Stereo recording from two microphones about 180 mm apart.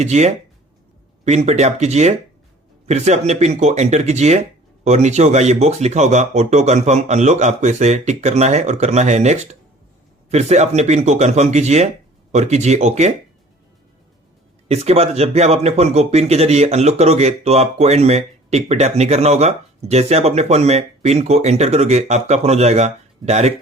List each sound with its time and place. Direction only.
0.0 s speech: 40° right (ahead or behind)
14.7 s speech: 35° right (ahead or behind)